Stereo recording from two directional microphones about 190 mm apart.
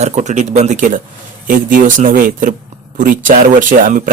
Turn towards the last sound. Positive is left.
turn(degrees=-45)  # may be behind; listen again after turning